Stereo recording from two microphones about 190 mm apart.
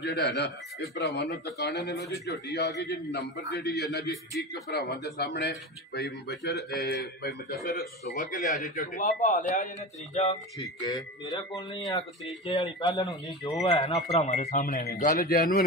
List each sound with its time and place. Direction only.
0.0 s speech: 60° left (ahead or behind)
4.1 s speech: centre (ahead or behind)
4.7 s a man's voice: 55° left (ahead or behind); by 9.7 s 40° left (ahead or behind)
10.3 s speech: 20° left (ahead or behind)
14.1 s speech: 35° left (ahead or behind)